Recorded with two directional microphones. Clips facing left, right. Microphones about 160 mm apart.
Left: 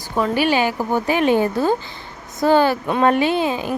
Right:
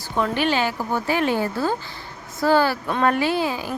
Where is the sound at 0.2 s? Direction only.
10° left (ahead or behind).